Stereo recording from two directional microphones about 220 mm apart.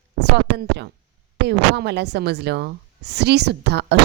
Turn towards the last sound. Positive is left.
turn(degrees=-50)  # may be behind; listen again after turning